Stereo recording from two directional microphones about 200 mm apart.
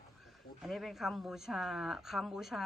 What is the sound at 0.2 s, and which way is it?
Speech, centre (ahead or behind).